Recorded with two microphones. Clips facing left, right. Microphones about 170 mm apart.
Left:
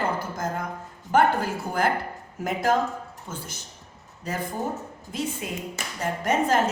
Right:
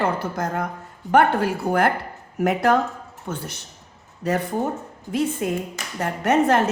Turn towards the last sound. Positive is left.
turn(degrees=-65)  # may be behind; listen again after turning